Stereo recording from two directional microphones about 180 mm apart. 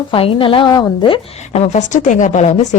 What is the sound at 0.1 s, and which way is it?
A woman's voice, 30° left (ahead or behind).